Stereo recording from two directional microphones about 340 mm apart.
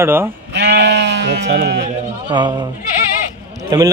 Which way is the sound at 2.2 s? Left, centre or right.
Centre.